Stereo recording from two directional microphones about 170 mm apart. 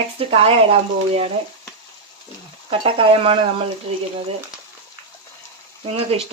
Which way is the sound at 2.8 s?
30° right (ahead or behind).